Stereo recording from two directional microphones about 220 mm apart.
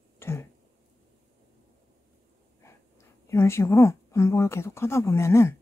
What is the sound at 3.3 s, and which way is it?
A woman's voice, 10° left (ahead or behind).